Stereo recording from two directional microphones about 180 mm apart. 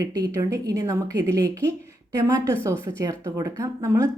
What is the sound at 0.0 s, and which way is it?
A woman's voice, 20° right (ahead or behind).